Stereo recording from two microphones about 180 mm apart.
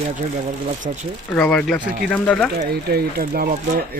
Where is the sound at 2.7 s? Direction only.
60° right (ahead or behind).